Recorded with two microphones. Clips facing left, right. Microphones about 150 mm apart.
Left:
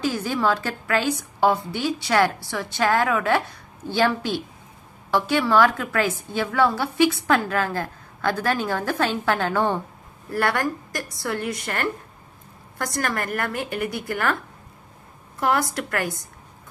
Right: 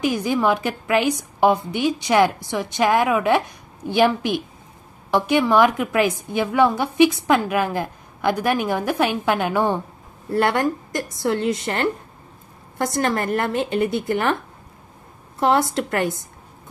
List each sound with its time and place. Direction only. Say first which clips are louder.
0.0 s a woman's voice: right 3 dB; 15° right (ahead or behind)
15.3 s a woman's voice: right 4 dB; 25° right (ahead or behind)